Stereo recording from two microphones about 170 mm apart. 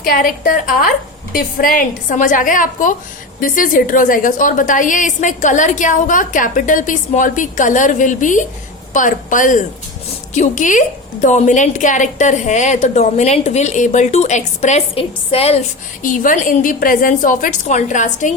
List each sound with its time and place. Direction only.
0.0 s a woman's voice: 55° left (ahead or behind); by 15.6 s 35° left (ahead or behind)
16.0 s a woman's voice: 50° left (ahead or behind)